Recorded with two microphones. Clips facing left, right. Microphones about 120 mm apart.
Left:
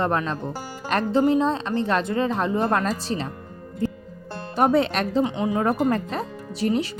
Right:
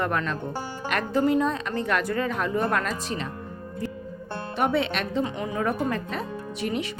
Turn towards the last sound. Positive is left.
turn(degrees=35)  # may be behind; listen again after turning